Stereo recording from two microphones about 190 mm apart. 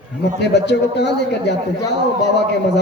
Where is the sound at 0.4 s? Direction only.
65° left (ahead or behind).